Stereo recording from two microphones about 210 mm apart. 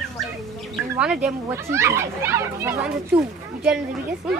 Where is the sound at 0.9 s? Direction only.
5° right (ahead or behind).